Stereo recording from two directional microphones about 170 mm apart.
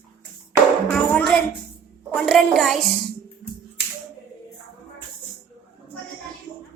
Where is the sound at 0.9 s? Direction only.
5° left (ahead or behind).